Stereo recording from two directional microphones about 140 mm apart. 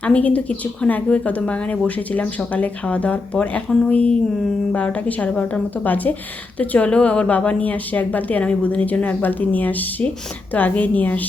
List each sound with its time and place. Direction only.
0.0 s speech: 10° left (ahead or behind)